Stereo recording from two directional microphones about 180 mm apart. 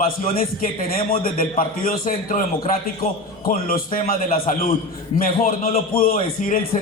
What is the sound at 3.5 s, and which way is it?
A man's voice, 50° left (ahead or behind).